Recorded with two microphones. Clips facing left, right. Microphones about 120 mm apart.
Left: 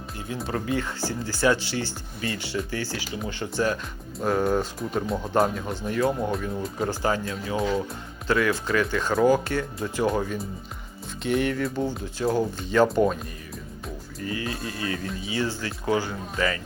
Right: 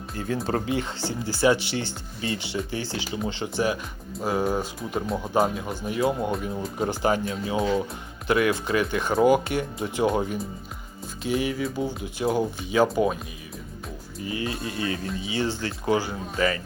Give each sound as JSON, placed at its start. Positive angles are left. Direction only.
{"t": 0.2, "sound": "speech", "side_deg": -40}
{"t": 0.7, "sound": "speech", "side_deg": -20}
{"t": 7.5, "sound": "music", "side_deg": -5}
{"t": 8.3, "sound": "speech", "side_deg": -20}
{"t": 11.2, "sound": "music", "side_deg": 0}
{"t": 12.0, "sound": "speech", "side_deg": -15}
{"t": 14.4, "sound": "speech", "side_deg": -25}